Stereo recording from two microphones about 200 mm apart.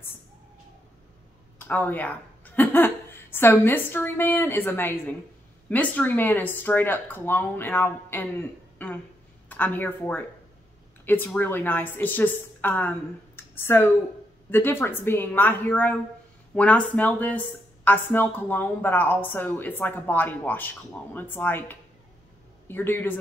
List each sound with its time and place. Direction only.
1.6 s a woman's voice: 10° left (ahead or behind)
13.4 s a sound: 10° left (ahead or behind)
14.5 s a woman's voice: 10° left (ahead or behind)